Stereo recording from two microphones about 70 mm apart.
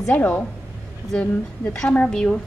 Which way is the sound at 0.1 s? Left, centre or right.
Left.